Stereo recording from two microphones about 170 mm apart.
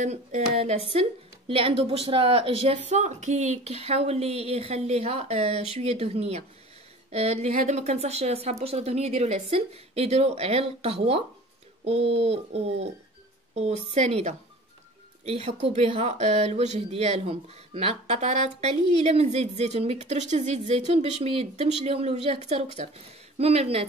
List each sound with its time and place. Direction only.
0.0 s speech: 40° right (ahead or behind)